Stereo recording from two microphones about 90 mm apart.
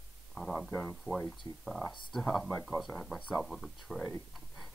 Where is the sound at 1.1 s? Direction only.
25° right (ahead or behind).